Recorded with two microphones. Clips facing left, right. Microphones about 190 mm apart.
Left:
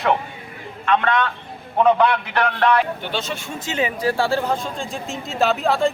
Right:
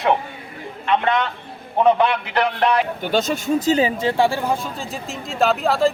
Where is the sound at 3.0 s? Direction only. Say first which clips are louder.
Right 6 dB; 45° right (ahead or behind); by 5.9 s centre (ahead or behind).